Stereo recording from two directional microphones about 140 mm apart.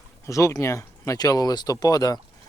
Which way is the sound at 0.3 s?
25° left (ahead or behind).